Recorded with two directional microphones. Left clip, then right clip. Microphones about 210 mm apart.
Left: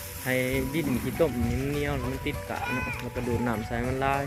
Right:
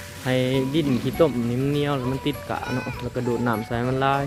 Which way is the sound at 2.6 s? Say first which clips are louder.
Right 2 dB; 25° left (ahead or behind).